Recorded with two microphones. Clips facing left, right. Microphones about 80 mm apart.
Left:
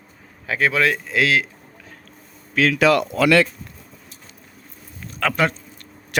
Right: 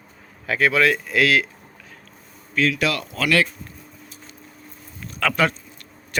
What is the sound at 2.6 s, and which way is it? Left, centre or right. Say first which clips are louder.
Speech: left 2 dB; left.